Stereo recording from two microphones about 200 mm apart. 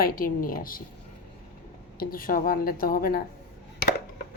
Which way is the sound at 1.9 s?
45° left (ahead or behind).